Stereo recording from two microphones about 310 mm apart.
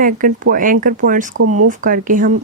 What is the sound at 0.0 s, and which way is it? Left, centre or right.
Speech, right.